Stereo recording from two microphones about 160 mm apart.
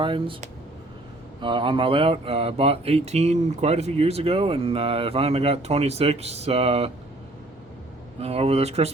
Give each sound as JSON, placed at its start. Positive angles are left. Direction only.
{"t": 0.0, "sound": "speech", "side_deg": -30}
{"t": 1.4, "sound": "speech", "side_deg": -30}
{"t": 8.2, "sound": "speech", "side_deg": -40}